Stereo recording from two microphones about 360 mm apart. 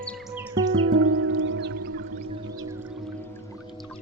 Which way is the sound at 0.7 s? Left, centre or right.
Right.